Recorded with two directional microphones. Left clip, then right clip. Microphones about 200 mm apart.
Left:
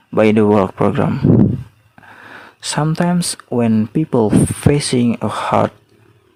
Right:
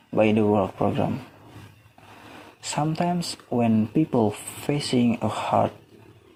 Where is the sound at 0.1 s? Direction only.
35° left (ahead or behind).